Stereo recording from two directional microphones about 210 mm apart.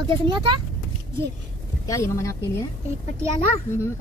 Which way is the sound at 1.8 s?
15° left (ahead or behind).